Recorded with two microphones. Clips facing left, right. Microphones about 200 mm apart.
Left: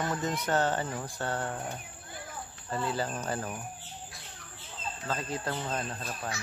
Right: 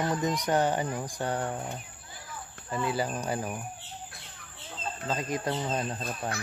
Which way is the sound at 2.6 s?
10° right (ahead or behind).